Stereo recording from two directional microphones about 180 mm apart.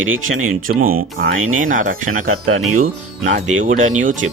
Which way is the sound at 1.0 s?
50° right (ahead or behind).